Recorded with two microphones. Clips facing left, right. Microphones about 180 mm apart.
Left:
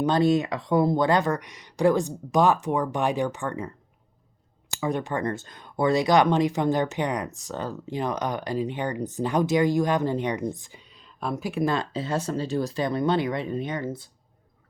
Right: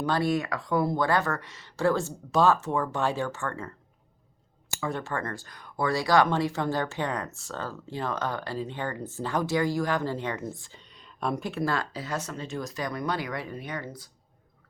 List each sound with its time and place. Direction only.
0.0 s speech: 20° left (ahead or behind)
4.8 s speech: 15° left (ahead or behind)
11.5 s speech: 20° left (ahead or behind)